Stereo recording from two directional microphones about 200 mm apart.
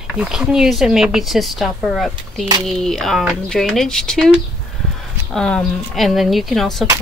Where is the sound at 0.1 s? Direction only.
5° right (ahead or behind).